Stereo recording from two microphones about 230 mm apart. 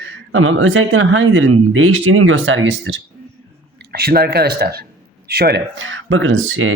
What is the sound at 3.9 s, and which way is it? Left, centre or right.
Speech, right.